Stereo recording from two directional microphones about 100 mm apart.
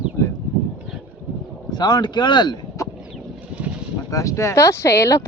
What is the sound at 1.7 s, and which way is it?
Speech, 45° left (ahead or behind).